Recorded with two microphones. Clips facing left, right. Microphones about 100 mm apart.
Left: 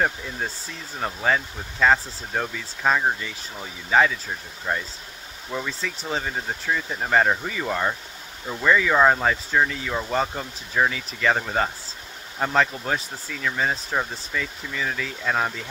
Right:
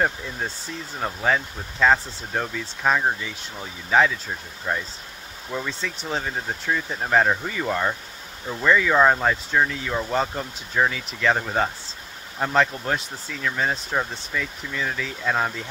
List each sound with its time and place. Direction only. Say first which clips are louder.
0.9 s speech: even; centre (ahead or behind)